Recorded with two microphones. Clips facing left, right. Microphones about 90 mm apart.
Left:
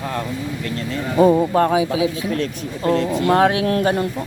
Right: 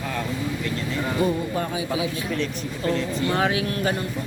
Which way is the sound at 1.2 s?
85° left.